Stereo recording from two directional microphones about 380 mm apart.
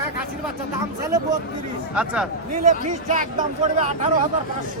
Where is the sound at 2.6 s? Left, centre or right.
Centre.